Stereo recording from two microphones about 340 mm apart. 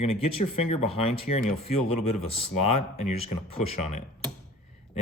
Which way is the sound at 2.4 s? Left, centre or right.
Left.